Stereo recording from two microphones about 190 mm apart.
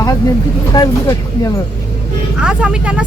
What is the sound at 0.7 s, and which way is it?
Speech, 20° left (ahead or behind).